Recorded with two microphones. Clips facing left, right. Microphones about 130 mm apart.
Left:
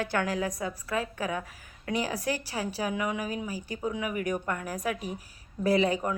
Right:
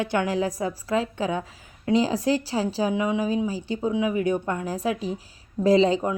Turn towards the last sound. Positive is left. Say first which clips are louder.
# right 6 dB
turn(degrees=-25)  # may be behind; listen again after turning